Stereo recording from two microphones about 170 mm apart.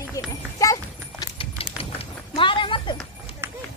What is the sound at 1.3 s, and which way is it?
Clip-clop, 35° left (ahead or behind).